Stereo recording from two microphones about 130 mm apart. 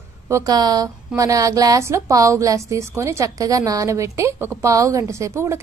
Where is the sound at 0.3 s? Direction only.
30° right (ahead or behind).